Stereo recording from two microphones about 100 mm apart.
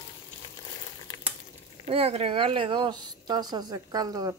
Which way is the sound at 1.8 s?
75° right (ahead or behind).